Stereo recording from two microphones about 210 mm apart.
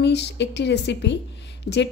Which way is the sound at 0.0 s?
55° left (ahead or behind).